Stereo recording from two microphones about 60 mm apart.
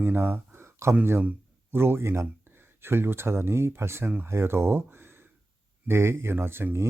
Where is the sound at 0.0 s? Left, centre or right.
Right.